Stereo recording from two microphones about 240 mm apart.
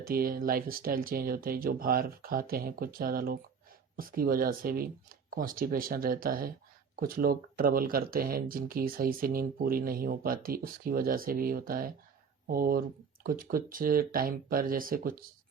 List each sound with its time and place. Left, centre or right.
0.0 s speech: right